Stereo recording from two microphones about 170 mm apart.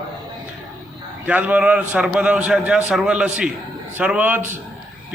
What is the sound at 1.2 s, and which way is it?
A man's voice, 10° right (ahead or behind).